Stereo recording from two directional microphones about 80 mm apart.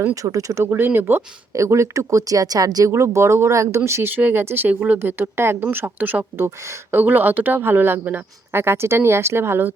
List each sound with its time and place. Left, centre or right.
0.1 s speech: right
0.6 s speech: right
1.5 s speech: right
2.9 s speech: right
7.0 s speech: right